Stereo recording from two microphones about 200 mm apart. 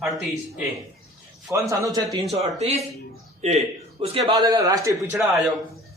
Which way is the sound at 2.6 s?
30° right (ahead or behind).